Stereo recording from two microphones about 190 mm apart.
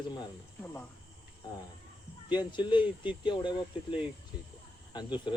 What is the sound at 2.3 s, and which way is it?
Speech, 25° left (ahead or behind).